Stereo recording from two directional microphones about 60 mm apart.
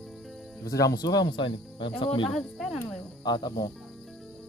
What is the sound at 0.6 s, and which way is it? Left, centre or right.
Speech, left.